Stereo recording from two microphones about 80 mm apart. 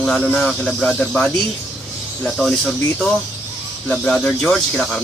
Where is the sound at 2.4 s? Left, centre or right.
Centre.